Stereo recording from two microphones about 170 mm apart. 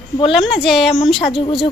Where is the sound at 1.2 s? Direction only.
30° left (ahead or behind).